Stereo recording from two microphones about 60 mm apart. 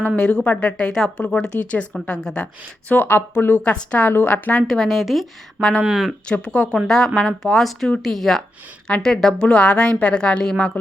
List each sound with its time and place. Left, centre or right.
0.2 s a woman's voice: centre
2.9 s speech: left
3.6 s speech: centre
4.6 s a woman's voice: centre
6.3 s a woman's voice: centre